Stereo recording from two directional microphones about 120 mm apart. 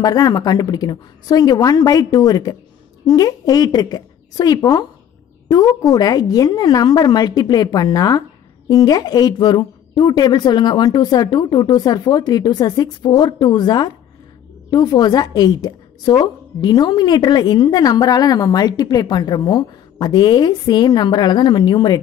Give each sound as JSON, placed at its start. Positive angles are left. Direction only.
{"t": 0.0, "sound": "a woman's voice", "side_deg": 30}